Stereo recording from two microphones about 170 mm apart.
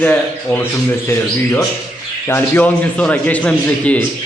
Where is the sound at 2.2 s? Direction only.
15° left (ahead or behind).